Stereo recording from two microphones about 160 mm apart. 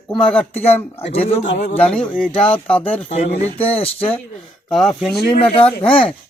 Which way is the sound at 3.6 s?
35° left (ahead or behind).